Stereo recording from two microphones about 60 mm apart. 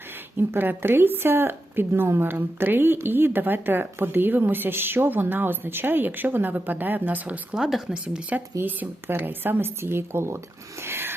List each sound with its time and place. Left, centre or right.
0.3 s a woman's voice: right
7.5 s speech: centre
8.6 s a woman's voice: right
10.8 s rub: right